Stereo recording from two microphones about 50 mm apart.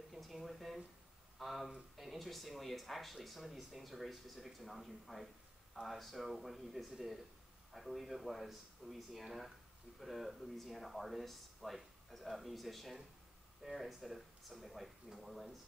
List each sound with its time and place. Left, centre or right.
0.1 s speech: centre